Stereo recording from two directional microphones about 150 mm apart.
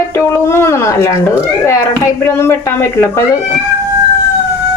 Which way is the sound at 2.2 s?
15° left (ahead or behind).